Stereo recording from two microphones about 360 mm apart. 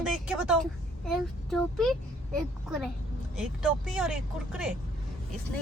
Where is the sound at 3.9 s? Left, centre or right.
Centre.